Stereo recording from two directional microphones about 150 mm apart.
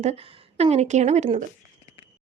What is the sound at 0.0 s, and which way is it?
Speech, 45° right (ahead or behind).